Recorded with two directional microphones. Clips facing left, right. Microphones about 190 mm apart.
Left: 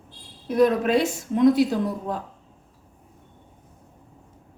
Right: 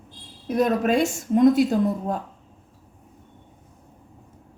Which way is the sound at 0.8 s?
45° right (ahead or behind).